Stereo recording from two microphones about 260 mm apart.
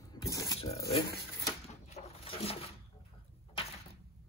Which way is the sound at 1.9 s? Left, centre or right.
Left.